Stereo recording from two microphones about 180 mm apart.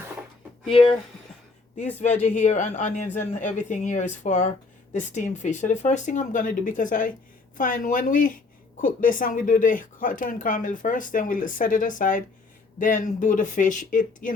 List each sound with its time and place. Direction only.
0.7 s speech: 30° left (ahead or behind)
2.0 s speech: 40° left (ahead or behind)